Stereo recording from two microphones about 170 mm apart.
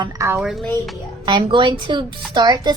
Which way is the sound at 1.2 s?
25° right (ahead or behind).